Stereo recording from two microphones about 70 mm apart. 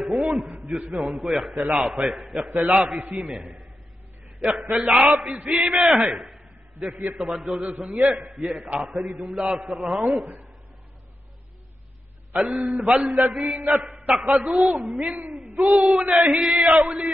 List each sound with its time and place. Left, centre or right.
0.0 s a sound: centre
0.9 s a man's voice: centre
5.1 s a man's voice: centre
8.2 s a man's voice: centre
12.4 s a man's voice: centre
13.7 s a sound: right
14.3 s a man's voice: centre